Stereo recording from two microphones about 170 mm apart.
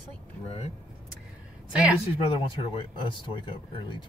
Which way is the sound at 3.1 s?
30° left (ahead or behind).